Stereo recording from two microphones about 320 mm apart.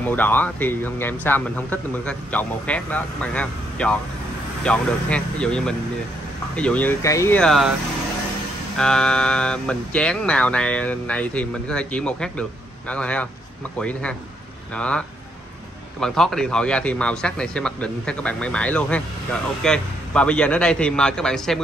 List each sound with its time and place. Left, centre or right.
0.0 s a man's voice: centre
8.7 s a man's voice: centre